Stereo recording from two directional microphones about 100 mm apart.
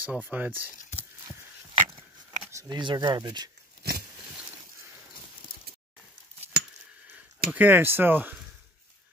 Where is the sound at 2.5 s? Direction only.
30° right (ahead or behind).